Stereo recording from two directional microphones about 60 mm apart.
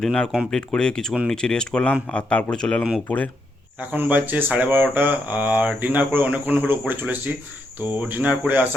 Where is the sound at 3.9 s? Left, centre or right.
Right.